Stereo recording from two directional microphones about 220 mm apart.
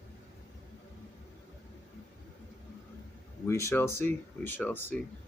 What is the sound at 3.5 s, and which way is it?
Speech, 15° left (ahead or behind).